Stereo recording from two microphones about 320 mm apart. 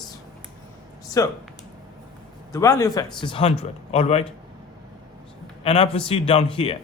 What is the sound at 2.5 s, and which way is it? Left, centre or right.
A man's voice, centre.